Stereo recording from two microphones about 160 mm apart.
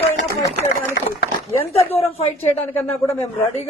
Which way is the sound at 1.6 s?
40° left (ahead or behind).